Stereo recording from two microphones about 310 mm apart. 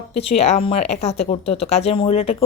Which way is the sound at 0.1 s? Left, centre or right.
Centre.